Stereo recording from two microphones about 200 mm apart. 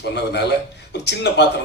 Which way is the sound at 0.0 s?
55° left (ahead or behind).